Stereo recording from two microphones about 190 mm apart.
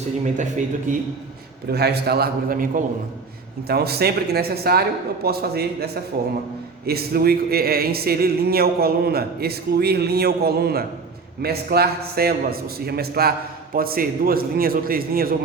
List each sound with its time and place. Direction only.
0.9 s a man's voice: 45° right (ahead or behind)
1.7 s a man's voice: 60° right (ahead or behind)